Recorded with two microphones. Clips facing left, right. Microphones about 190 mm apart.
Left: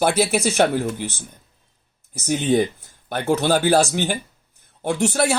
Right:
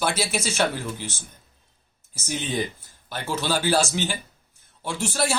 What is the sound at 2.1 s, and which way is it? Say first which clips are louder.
Speech: left 9 dB; 50° left (ahead or behind).